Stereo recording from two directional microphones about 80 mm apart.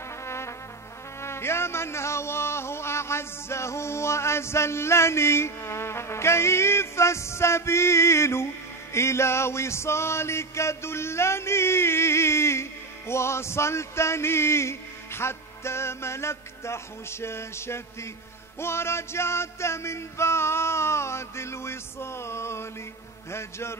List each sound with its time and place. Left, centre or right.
0.2 s music: left